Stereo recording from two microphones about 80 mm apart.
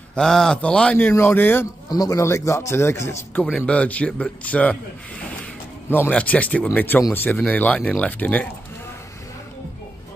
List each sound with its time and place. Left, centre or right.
0.1 s speech: centre
1.1 s speech: left
1.9 s a man's voice: left
3.5 s speech: centre
5.9 s speech: left